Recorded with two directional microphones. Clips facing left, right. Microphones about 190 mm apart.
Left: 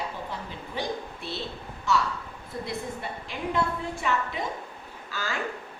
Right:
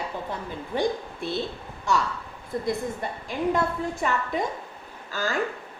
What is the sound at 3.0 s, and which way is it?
A woman's voice, 45° right (ahead or behind).